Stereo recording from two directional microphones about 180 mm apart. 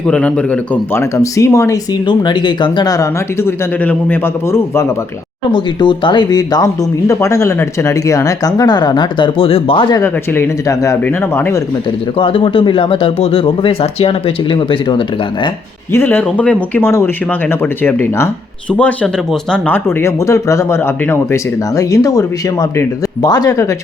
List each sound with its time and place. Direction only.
0.1 s speech: 5° left (ahead or behind)
5.5 s speech: 25° left (ahead or behind)
10.0 s speech: 10° left (ahead or behind)
12.1 s speech: 30° left (ahead or behind)
15.9 s speech: 10° left (ahead or behind)